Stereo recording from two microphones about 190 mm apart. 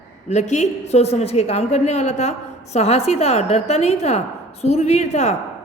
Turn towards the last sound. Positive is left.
turn(degrees=35)  # may be behind; listen again after turning